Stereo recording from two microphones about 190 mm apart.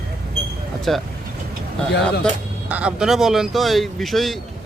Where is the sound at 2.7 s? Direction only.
5° right (ahead or behind).